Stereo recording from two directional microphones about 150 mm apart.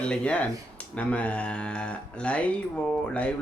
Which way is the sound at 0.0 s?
5° left (ahead or behind).